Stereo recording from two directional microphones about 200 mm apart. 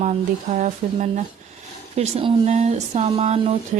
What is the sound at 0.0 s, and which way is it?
Speech, 35° right (ahead or behind).